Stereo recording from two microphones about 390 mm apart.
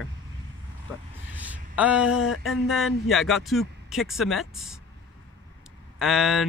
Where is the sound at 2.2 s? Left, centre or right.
Left.